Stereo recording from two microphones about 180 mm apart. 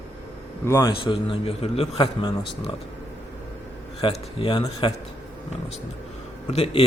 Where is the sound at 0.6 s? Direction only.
15° left (ahead or behind).